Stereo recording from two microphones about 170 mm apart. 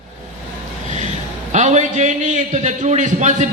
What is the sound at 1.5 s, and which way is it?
A man's voice, 45° right (ahead or behind).